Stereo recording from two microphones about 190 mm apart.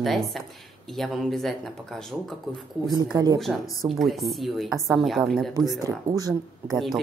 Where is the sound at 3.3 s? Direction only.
Centre (ahead or behind).